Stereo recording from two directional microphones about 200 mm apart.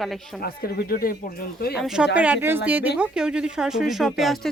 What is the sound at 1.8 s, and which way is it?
Speech, centre (ahead or behind).